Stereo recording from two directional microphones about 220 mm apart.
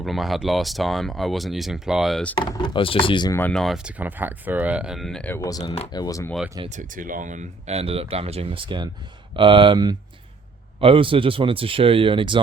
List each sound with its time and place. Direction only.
0.0 s speech: centre (ahead or behind)
2.3 s speech: 20° left (ahead or behind)
6.6 s speech: 35° right (ahead or behind)